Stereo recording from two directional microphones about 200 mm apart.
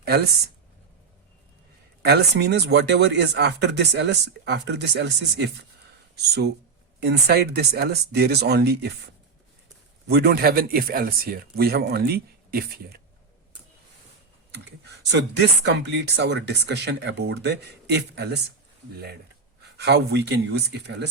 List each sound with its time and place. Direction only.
0.0 s speech: 55° right (ahead or behind)
2.0 s speech: 55° right (ahead or behind)
10.1 s speech: 55° right (ahead or behind)
15.0 s speech: 60° right (ahead or behind)
19.7 s speech: 55° right (ahead or behind)